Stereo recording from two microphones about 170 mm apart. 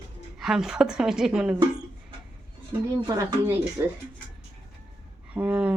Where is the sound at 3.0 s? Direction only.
20° right (ahead or behind).